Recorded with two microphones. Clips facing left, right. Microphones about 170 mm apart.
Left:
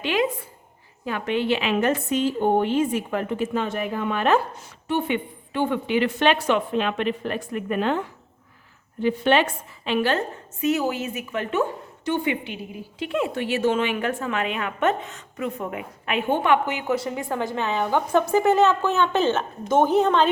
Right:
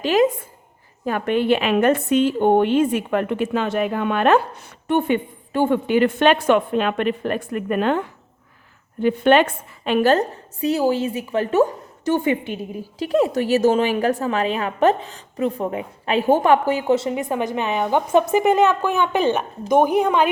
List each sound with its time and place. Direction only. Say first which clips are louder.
0.0 s a woman's voice: right 6 dB; 40° right (ahead or behind); by 20.3 s 10° right (ahead or behind)